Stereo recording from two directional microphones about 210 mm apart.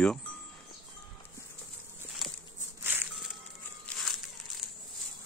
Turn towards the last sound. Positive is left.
turn(degrees=0)  # may be behind; listen again after turning